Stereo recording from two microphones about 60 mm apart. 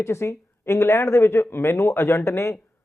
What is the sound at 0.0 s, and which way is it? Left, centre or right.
Speech, left.